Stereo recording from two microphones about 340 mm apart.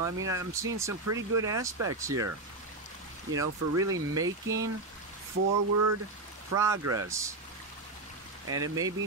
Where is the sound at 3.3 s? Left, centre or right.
Centre.